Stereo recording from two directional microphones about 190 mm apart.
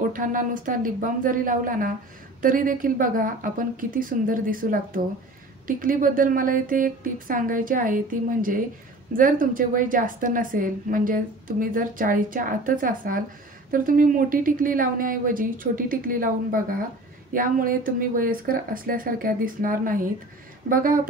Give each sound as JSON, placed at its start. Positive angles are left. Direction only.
{"t": 0.1, "sound": "a woman's voice", "side_deg": -45}